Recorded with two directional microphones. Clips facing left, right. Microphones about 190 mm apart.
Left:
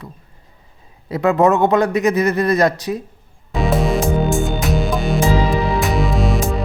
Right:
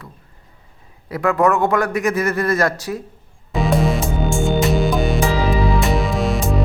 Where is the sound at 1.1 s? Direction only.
20° left (ahead or behind).